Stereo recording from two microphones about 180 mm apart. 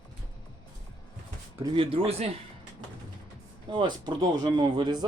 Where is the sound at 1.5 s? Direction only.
25° right (ahead or behind).